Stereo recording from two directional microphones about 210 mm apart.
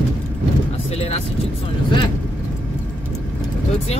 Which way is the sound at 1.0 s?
30° left (ahead or behind).